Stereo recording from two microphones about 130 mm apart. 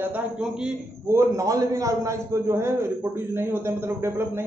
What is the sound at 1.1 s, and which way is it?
A man's voice, 20° right (ahead or behind).